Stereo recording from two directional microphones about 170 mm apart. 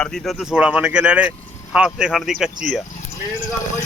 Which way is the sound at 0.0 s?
5° left (ahead or behind).